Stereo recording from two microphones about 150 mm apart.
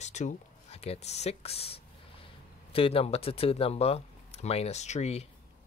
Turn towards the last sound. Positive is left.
turn(degrees=45)  # may be behind; listen again after turning